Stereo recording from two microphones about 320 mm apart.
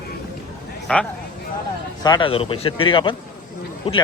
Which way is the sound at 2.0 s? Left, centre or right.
Centre.